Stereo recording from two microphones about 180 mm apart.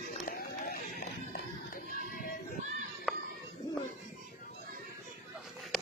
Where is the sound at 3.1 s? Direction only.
Centre (ahead or behind).